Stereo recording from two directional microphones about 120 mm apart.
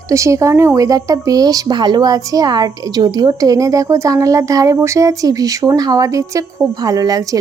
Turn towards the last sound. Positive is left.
turn(degrees=-30)  # may be behind; listen again after turning